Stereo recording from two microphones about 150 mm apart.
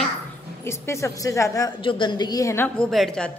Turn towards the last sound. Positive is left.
turn(degrees=0)  # may be behind; listen again after turning